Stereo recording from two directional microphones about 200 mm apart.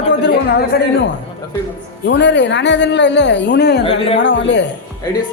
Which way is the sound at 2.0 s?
60° left (ahead or behind).